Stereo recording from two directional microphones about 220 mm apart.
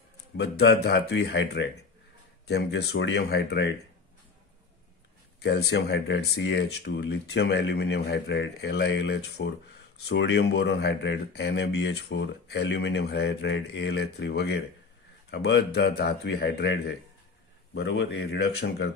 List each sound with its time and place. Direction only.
0.4 s speech: 50° left (ahead or behind)
5.4 s speech: 50° left (ahead or behind)